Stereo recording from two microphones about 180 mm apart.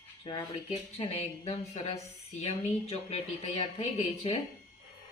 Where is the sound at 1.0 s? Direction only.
35° left (ahead or behind).